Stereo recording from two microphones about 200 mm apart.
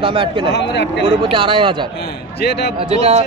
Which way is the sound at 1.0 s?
25° right (ahead or behind).